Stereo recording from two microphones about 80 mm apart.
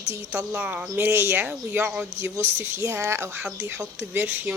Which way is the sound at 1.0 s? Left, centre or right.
Right.